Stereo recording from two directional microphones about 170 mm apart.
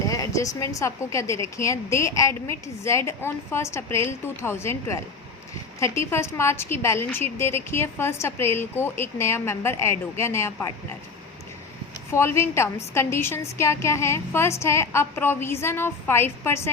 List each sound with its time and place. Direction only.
0.1 s speech: 20° left (ahead or behind)
12.1 s speech: 15° left (ahead or behind)